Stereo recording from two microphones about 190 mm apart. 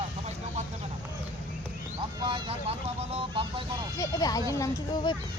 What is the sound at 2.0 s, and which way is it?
Speech, 25° right (ahead or behind).